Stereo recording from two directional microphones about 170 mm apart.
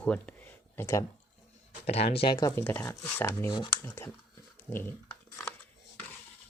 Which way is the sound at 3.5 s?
25° left (ahead or behind).